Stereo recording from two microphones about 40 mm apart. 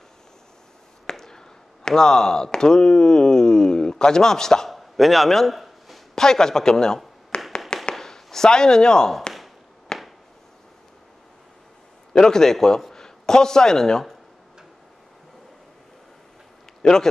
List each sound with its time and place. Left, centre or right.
1.1 s speech: centre
4.6 s chop: centre
6.1 s a man's voice: centre
7.3 s tap: left
7.9 s speech: centre
9.9 s a sound: centre
12.1 s a man's voice: centre
16.8 s a man's voice: centre